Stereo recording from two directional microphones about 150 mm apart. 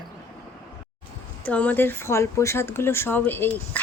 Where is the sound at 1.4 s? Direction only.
10° left (ahead or behind).